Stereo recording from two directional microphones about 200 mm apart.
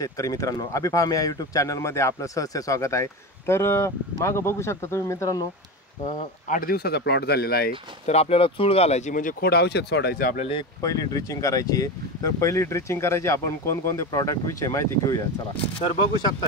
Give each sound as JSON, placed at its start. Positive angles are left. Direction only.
{"t": 0.0, "sound": "speech", "side_deg": 15}
{"t": 6.0, "sound": "speech", "side_deg": 45}
{"t": 8.1, "sound": "speech", "side_deg": 30}
{"t": 10.8, "sound": "speech", "side_deg": 15}